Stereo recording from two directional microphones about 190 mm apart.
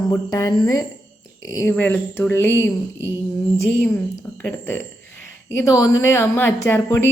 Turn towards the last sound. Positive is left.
turn(degrees=10)  # may be behind; listen again after turning